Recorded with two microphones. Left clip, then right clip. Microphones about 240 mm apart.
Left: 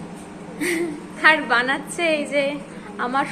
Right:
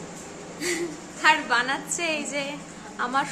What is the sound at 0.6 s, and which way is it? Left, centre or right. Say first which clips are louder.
A woman's voice: left 5 dB; centre.